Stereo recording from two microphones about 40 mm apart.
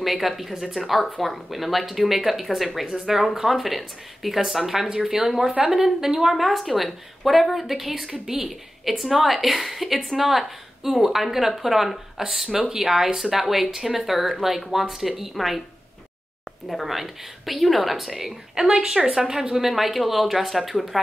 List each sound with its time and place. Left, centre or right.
0.0 s a woman's voice: centre
16.6 s a woman's voice: centre; by 19.1 s right
19.1 s a woman's voice: centre